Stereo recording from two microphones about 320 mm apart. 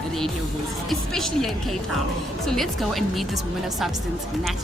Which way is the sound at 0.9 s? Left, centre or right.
Centre.